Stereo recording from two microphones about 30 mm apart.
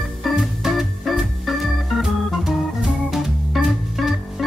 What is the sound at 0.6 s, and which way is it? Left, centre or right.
Organ, centre.